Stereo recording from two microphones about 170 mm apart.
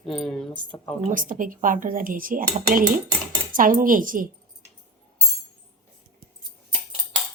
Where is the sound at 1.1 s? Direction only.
50° right (ahead or behind).